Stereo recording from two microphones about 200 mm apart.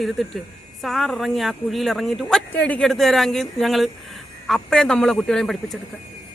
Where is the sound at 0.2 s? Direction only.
Centre (ahead or behind).